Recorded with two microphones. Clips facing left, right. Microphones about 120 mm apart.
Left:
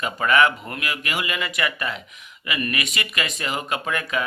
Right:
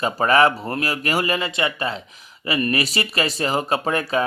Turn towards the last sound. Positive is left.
turn(degrees=-35)  # may be behind; listen again after turning